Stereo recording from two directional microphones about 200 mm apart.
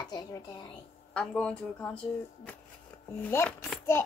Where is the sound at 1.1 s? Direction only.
5° left (ahead or behind).